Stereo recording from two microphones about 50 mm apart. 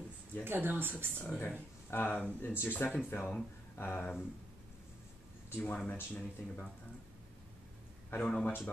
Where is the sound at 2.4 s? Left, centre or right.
Left.